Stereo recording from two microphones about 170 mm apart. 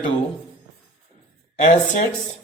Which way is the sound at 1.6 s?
45° left (ahead or behind).